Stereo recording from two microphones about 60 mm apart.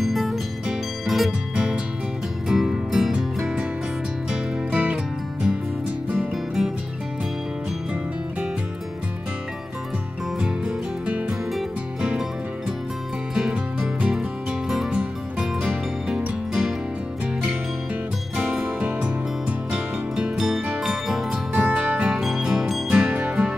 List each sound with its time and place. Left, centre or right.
0.0 s music: centre
2.4 s music: centre
4.3 s music: right
6.3 s music: centre
10.4 s music: centre
13.3 s music: centre
18.3 s music: centre
20.3 s music: centre
20.6 s music: centre
21.6 s music: right
22.1 s music: centre